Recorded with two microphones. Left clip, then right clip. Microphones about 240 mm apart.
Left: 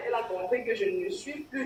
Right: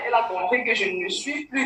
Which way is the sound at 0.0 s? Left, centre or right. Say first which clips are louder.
Right 8 dB; right.